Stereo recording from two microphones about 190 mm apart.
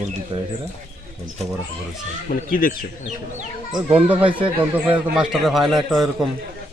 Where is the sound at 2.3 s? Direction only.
45° left (ahead or behind).